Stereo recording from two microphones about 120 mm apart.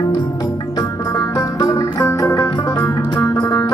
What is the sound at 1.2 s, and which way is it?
Music, 30° left (ahead or behind).